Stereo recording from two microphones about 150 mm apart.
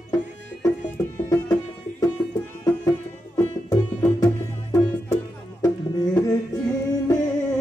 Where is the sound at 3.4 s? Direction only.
15° left (ahead or behind).